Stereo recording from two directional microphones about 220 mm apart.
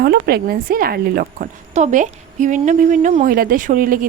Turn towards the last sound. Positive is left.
turn(degrees=-40)  # may be behind; listen again after turning